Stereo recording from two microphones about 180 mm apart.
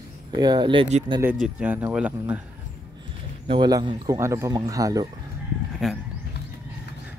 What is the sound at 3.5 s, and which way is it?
Speech, 25° right (ahead or behind).